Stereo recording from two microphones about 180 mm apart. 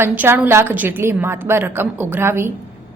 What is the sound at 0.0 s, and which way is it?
A woman's voice, 10° right (ahead or behind).